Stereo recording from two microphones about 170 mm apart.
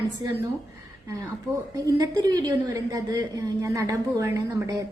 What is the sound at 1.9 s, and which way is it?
A woman's voice, 20° right (ahead or behind).